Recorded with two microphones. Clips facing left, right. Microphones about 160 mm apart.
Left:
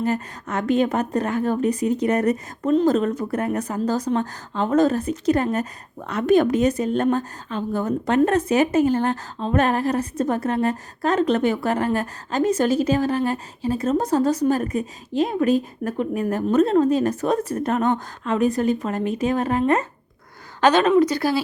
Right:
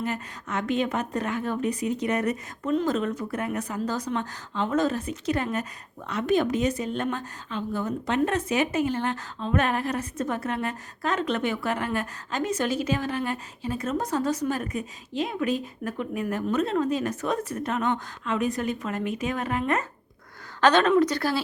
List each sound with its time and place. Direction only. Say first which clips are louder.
0.0 s a woman's voice: left 7 dB; 40° left (ahead or behind)
20.6 s speech: left 3 dB; 10° left (ahead or behind)